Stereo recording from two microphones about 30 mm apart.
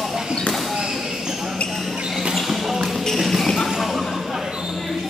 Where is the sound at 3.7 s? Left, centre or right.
Centre.